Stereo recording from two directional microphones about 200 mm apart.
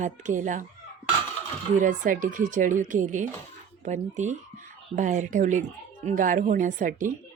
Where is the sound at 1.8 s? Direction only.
40° right (ahead or behind).